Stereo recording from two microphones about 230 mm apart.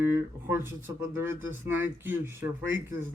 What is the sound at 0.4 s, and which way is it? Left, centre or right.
Speech, centre.